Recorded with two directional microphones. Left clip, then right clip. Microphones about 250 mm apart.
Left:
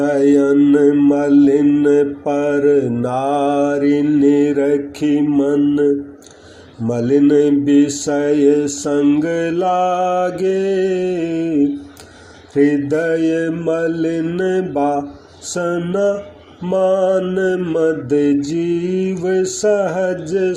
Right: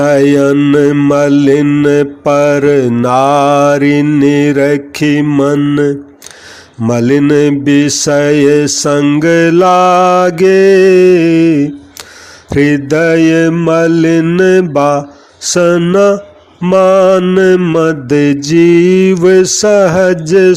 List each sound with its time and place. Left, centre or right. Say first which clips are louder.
0.0 s mantra: right 6 dB; right
12.5 s mantra: right 5 dB; right